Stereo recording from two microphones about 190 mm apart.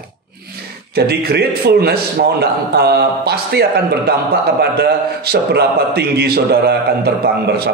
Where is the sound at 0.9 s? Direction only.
55° right (ahead or behind).